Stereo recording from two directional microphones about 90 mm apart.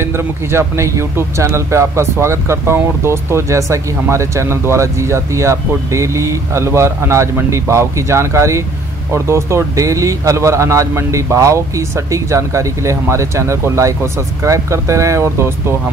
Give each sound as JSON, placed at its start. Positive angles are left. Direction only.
{"t": 0.0, "sound": "speech", "side_deg": -30}